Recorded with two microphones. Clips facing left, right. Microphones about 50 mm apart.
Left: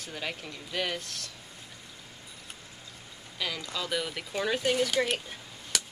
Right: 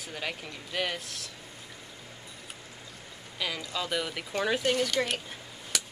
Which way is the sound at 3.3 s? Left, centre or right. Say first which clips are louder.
Right 1 dB; centre.